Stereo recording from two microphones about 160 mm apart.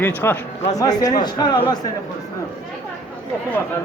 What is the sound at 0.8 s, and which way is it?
Speech, 25° left (ahead or behind).